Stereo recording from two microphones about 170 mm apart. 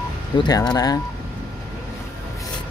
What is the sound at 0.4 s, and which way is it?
Speech, 25° left (ahead or behind).